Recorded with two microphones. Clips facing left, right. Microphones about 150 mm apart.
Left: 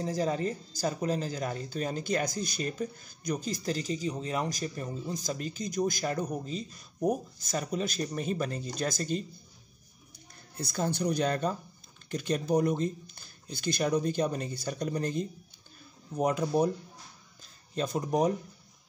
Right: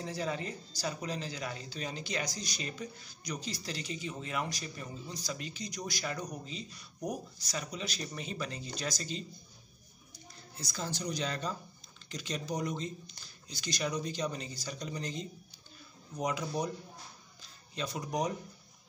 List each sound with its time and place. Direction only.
0.0 s speech: 40° left (ahead or behind)
17.4 s music: 45° left (ahead or behind)